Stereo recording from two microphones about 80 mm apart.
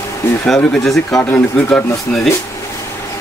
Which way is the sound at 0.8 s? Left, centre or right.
Centre.